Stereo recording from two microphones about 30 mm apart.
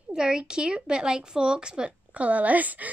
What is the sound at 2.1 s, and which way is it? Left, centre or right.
Speech, right.